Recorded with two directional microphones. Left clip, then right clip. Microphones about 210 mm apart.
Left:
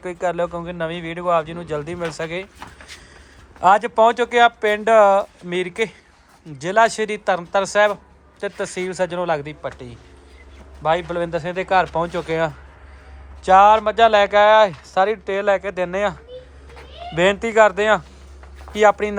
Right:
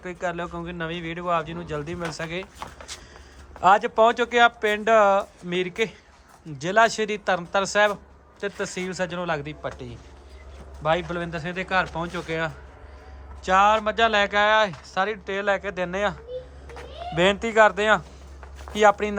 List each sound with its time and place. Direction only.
0.0 s speech: 10° right (ahead or behind)
3.6 s speech: 15° right (ahead or behind)
17.2 s speech: 15° right (ahead or behind)